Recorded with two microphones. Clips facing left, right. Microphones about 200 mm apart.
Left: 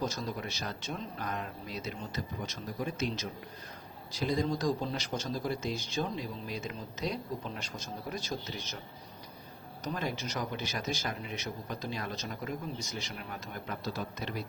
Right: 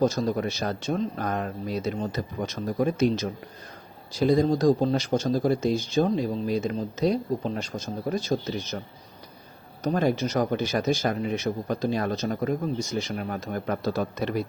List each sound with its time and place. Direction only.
0.0 s speech: 45° right (ahead or behind)
2.1 s a man's voice: 60° right (ahead or behind)
4.2 s speech: 40° right (ahead or behind)
9.8 s a man's voice: 50° right (ahead or behind)